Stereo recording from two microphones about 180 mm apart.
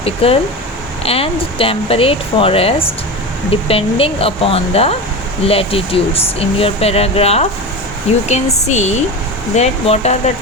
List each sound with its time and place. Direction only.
0.0 s speech: 30° left (ahead or behind)